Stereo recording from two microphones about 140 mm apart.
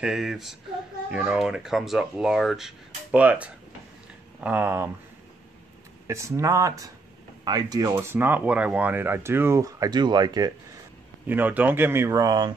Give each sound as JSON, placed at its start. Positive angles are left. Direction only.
{"t": 0.0, "sound": "speech", "side_deg": -5}
{"t": 6.0, "sound": "speech", "side_deg": -20}
{"t": 7.9, "sound": "speech", "side_deg": -15}
{"t": 11.2, "sound": "speech", "side_deg": -15}